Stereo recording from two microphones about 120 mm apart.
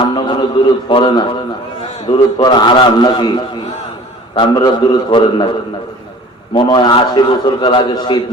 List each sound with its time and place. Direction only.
0.0 s radio: 40° left (ahead or behind)
0.9 s a man's voice: 40° left (ahead or behind)
6.5 s a man's voice: 40° left (ahead or behind)